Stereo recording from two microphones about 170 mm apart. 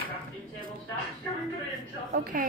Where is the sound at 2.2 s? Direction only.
55° right (ahead or behind).